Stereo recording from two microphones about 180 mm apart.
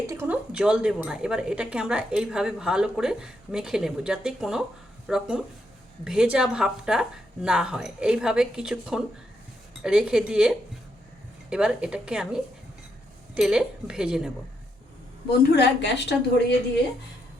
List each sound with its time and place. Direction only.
0.1 s speech: 10° right (ahead or behind)
15.5 s a woman's voice: 70° left (ahead or behind)